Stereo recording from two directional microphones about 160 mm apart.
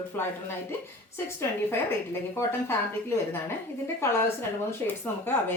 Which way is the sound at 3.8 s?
15° left (ahead or behind).